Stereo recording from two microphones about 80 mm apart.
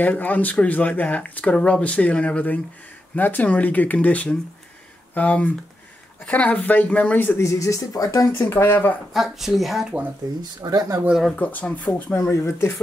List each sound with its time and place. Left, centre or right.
0.0 s speech: left
7.4 s speech: left
8.4 s speech: left
9.1 s speech: centre
10.6 s speech: right
11.3 s speech: centre
12.2 s speech: left